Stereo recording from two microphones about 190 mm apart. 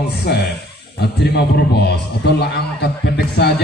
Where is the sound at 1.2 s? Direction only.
60° left (ahead or behind).